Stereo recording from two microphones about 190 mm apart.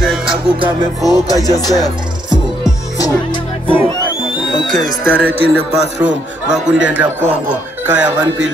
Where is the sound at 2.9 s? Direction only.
20° left (ahead or behind).